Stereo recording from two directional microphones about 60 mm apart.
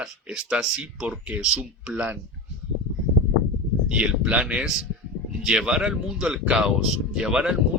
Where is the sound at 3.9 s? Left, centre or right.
Centre.